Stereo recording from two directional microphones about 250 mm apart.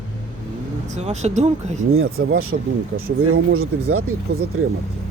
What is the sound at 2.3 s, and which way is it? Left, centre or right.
Speech, right.